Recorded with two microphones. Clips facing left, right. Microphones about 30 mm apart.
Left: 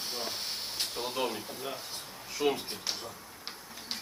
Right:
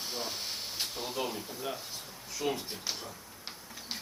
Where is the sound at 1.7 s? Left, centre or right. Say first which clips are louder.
Left 1 dB; left.